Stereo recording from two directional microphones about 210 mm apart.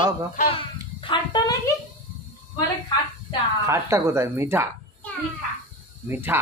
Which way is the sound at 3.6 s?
15° right (ahead or behind).